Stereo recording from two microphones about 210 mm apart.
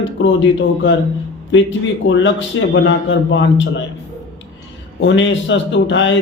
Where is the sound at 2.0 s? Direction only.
60° left (ahead or behind).